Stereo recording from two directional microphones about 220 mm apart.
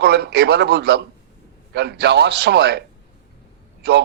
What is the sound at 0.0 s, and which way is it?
A man's voice, 50° right (ahead or behind).